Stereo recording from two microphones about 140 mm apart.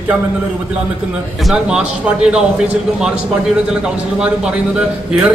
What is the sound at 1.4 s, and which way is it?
Speech, 5° right (ahead or behind).